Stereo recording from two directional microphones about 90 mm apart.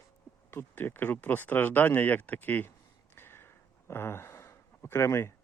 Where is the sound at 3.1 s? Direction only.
25° left (ahead or behind).